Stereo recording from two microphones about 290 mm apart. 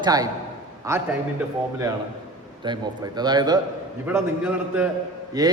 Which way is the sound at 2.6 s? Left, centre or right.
Centre.